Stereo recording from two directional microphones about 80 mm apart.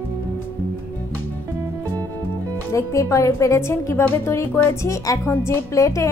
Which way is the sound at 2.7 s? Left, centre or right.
Left.